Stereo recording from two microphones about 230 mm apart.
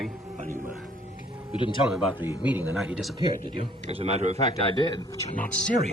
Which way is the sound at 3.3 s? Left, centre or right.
Right.